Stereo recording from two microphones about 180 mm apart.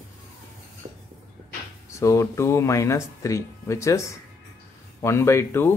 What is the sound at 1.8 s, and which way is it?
Speech, 15° left (ahead or behind).